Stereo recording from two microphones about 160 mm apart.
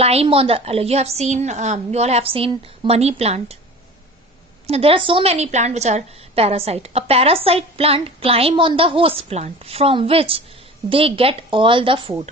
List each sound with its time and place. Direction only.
0.0 s a woman's voice: 40° right (ahead or behind)
4.6 s a woman's voice: 40° right (ahead or behind)